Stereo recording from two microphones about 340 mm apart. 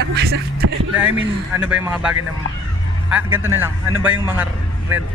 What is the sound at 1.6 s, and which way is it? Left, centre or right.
A man's voice, centre.